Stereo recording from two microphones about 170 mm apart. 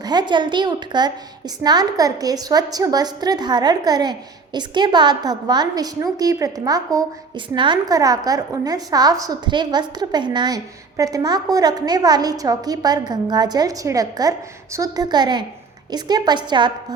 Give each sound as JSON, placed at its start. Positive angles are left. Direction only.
{"t": 0.0, "sound": "a woman's voice", "side_deg": -25}